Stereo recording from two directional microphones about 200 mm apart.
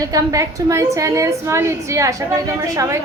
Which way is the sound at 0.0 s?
15° right (ahead or behind).